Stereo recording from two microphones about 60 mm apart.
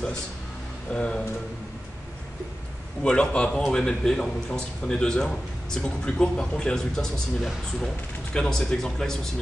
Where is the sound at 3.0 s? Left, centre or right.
Centre.